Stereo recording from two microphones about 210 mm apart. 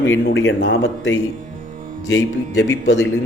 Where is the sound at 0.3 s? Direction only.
60° left (ahead or behind).